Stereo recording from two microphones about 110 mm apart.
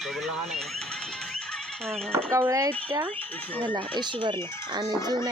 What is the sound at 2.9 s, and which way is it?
Speech, 50° right (ahead or behind).